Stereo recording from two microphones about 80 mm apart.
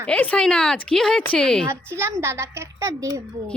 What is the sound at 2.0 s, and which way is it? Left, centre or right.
A woman's voice, right.